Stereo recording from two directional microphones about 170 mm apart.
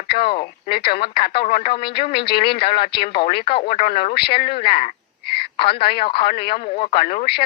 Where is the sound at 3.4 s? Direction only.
30° left (ahead or behind).